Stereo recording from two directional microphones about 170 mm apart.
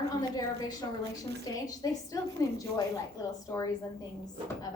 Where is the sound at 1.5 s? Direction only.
25° left (ahead or behind).